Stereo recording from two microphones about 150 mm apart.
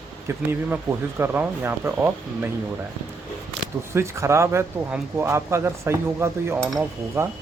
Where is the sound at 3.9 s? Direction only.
20° right (ahead or behind).